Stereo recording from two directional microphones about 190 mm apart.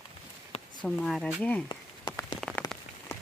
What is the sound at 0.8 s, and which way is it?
Speech, 5° left (ahead or behind).